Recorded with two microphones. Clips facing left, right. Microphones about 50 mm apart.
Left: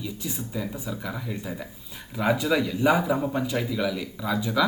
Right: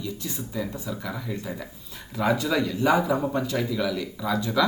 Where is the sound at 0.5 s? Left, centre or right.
Centre.